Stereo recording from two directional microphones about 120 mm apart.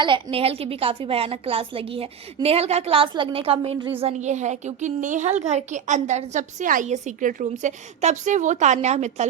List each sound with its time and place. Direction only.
0.0 s a woman's voice: 45° right (ahead or behind)
3.9 s a woman's voice: 65° right (ahead or behind)